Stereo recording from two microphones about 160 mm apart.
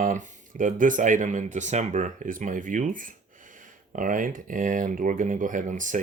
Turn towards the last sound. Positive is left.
turn(degrees=-50)  # may be behind; listen again after turning